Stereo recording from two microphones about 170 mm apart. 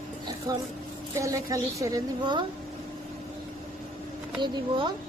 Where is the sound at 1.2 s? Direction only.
20° right (ahead or behind).